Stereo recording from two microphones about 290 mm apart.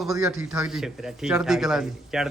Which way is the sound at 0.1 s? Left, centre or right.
Centre.